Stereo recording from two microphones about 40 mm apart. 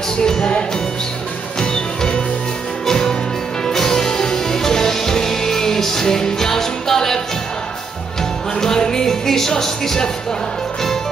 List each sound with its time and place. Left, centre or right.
0.2 s music: centre
8.5 s music: centre